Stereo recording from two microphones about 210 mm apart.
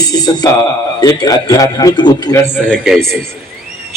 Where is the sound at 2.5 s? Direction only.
5° left (ahead or behind).